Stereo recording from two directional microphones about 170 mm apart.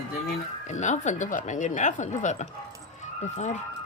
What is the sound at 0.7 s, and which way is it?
A woman's voice, 45° left (ahead or behind).